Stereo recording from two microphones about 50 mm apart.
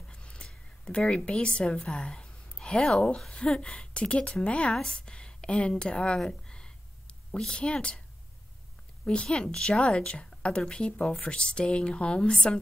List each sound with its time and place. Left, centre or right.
0.1 s a sound: centre
0.9 s a woman's voice: centre
9.0 s a woman's voice: centre